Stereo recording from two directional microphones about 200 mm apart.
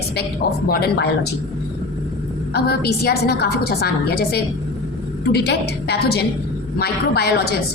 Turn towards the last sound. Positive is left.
turn(degrees=50)  # may be behind; listen again after turning